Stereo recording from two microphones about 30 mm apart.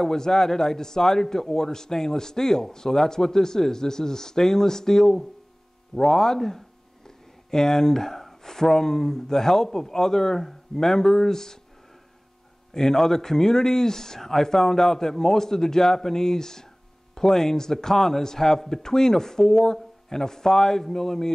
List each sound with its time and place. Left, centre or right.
0.0 s a man's voice: centre
7.1 s a sound: centre
8.5 s a man's voice: centre
12.7 s a man's voice: centre